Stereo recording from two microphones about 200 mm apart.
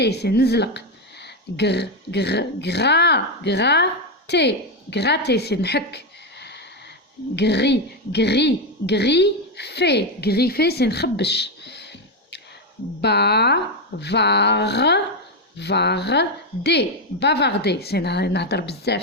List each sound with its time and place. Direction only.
0.0 s speech: 55° left (ahead or behind)
7.3 s a woman's voice: 55° left (ahead or behind)